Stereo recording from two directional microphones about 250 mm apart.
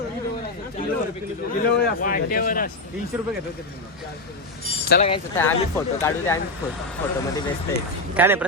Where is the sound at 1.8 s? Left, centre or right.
Left.